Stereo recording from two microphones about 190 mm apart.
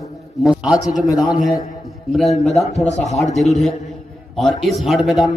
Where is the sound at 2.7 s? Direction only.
35° left (ahead or behind).